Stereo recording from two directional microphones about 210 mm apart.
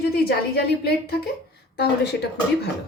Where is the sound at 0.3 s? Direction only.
50° left (ahead or behind).